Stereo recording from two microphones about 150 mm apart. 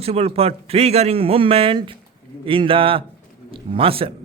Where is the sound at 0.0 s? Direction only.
40° right (ahead or behind).